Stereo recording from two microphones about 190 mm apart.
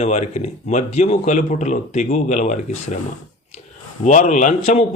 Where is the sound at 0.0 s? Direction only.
35° left (ahead or behind).